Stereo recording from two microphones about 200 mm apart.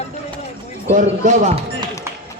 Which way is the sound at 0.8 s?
35° right (ahead or behind).